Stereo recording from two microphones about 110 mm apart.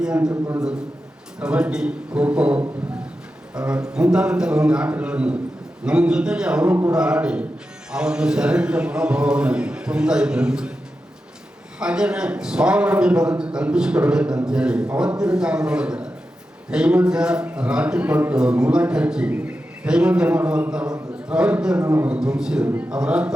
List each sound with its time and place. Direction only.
0.0 s a man's voice: 10° right (ahead or behind)
1.4 s a man's voice: 10° right (ahead or behind)
11.8 s a man's voice: 10° right (ahead or behind)
21.8 s a man's voice: 30° right (ahead or behind)
22.0 s a man's voice: 10° right (ahead or behind)